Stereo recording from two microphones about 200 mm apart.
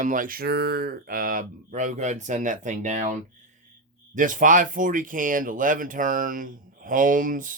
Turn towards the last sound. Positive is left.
turn(degrees=-40)  # may be behind; listen again after turning